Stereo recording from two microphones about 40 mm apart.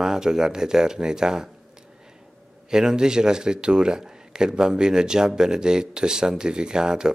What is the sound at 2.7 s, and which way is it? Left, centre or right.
Speech, centre.